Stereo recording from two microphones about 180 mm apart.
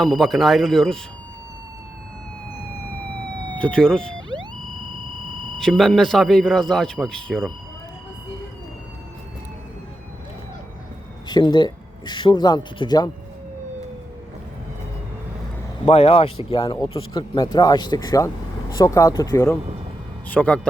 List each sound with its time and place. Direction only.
0.0 s speech: centre (ahead or behind)
3.6 s a man's voice: 5° left (ahead or behind)
11.3 s speech: 25° left (ahead or behind)
15.9 s speech: 35° left (ahead or behind); by 20.6 s 10° left (ahead or behind)